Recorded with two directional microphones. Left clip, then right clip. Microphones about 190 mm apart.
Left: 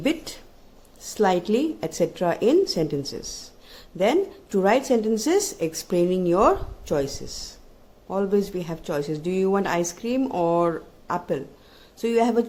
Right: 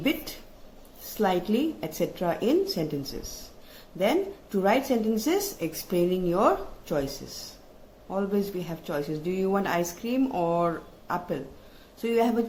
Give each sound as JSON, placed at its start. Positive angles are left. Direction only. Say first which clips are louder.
{"t": 0.0, "sound": "a woman's voice", "louder": "left 3 dB", "side_deg": 50}